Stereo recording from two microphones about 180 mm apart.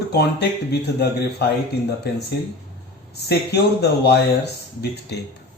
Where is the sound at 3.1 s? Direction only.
65° left (ahead or behind).